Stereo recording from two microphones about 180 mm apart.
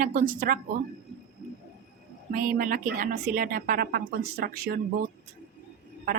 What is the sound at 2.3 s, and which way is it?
Speech, 50° right (ahead or behind).